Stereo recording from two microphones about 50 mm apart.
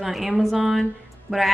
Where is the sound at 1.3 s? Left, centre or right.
Centre.